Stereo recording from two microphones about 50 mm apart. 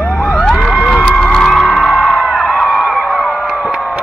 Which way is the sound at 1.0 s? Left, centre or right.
Left.